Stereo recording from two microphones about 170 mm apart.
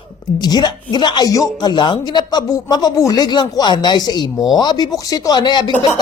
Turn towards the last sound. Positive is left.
turn(degrees=25)  # may be behind; listen again after turning